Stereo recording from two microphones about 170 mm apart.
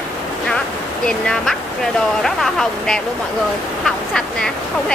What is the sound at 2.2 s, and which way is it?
Speech, centre (ahead or behind).